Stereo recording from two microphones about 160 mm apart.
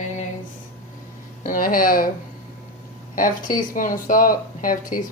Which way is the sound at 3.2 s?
60° left (ahead or behind).